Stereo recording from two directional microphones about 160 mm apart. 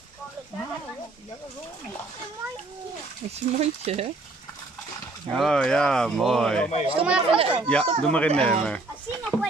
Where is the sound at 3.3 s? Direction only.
40° right (ahead or behind).